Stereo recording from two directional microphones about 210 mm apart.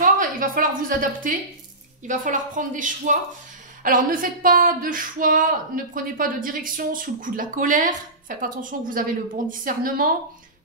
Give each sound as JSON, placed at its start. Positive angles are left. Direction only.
{"t": 0.0, "sound": "a woman's voice", "side_deg": -40}